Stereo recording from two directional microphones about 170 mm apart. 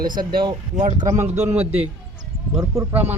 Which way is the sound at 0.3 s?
25° right (ahead or behind).